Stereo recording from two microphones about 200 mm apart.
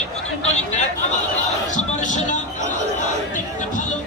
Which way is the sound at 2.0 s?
35° left (ahead or behind).